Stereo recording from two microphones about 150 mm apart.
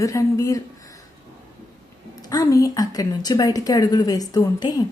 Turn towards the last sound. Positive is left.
turn(degrees=25)  # may be behind; listen again after turning